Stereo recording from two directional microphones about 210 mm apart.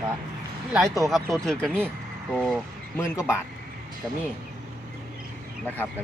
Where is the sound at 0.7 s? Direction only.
15° right (ahead or behind).